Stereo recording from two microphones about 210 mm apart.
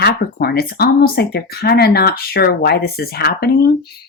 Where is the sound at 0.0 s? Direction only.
50° left (ahead or behind).